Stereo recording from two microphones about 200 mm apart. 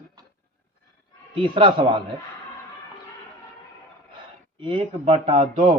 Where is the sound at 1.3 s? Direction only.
25° right (ahead or behind).